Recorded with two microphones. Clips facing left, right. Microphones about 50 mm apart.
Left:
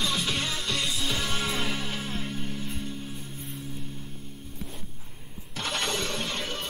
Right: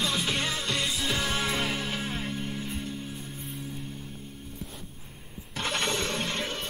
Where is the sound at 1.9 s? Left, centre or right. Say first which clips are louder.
Right 1 dB; right.